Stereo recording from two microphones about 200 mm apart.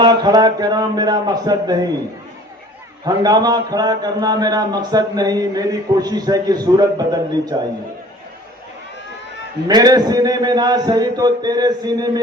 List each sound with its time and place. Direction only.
0.0 s a man's voice: 20° right (ahead or behind)
3.0 s a man's voice: 20° right (ahead or behind)
9.6 s a man's voice: 20° right (ahead or behind)